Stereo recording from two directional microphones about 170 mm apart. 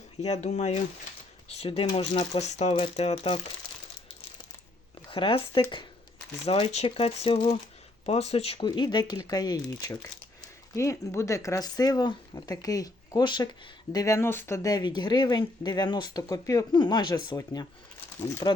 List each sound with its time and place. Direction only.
0.2 s speech: 40° left (ahead or behind)
5.1 s speech: 30° left (ahead or behind)